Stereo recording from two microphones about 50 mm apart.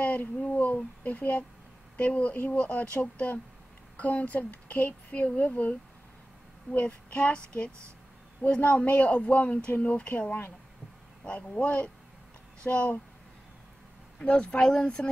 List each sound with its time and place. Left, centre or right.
0.0 s a sound: left
0.5 s speech: left
2.5 s child singing: left
3.9 s speech: left
6.7 s child singing: left
8.5 s speech: left
9.1 s child singing: left
9.9 s speech: left
12.6 s child singing: left
14.1 s child singing: left